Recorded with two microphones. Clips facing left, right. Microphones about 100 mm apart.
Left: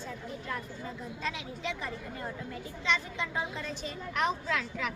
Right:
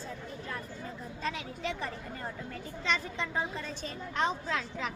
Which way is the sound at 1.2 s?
40° right (ahead or behind).